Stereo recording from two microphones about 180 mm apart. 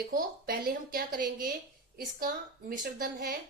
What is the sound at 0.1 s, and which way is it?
A woman's voice, 50° right (ahead or behind).